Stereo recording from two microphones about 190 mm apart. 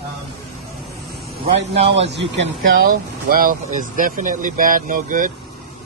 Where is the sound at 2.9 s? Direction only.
50° right (ahead or behind).